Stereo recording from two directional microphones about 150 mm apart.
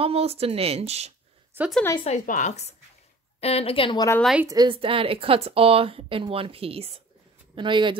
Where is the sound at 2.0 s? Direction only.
60° left (ahead or behind); by 4.0 s 35° left (ahead or behind).